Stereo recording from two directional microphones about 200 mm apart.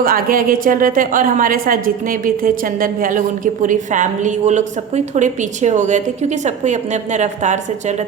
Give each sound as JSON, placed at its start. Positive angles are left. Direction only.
{"t": 0.0, "sound": "a woman's voice", "side_deg": -45}